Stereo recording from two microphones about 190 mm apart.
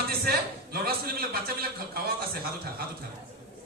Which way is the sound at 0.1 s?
55° right (ahead or behind).